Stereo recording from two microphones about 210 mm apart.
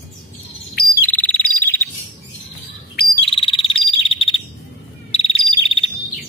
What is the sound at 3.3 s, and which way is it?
Frog, 25° left (ahead or behind).